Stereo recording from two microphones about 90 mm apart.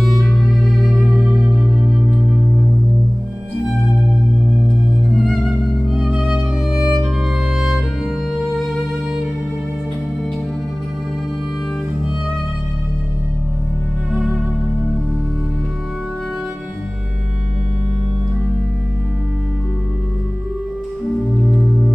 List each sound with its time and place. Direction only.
0.6 s music: centre (ahead or behind)
5.1 s music: centre (ahead or behind)